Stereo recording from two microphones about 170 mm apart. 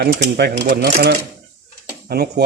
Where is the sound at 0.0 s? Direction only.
75° right (ahead or behind).